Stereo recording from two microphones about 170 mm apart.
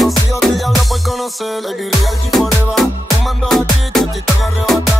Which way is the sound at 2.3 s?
Centre (ahead or behind).